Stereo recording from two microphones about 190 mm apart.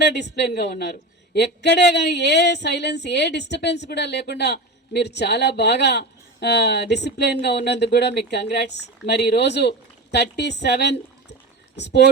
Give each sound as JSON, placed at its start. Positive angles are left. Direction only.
{"t": 0.0, "sound": "a woman's voice", "side_deg": 65}